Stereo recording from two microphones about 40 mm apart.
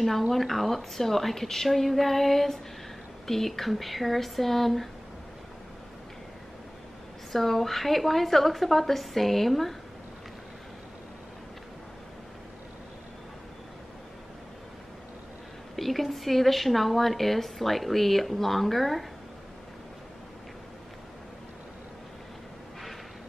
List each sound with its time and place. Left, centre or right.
0.0 s a woman's voice: centre
7.3 s a woman's voice: centre
15.7 s a woman's voice: centre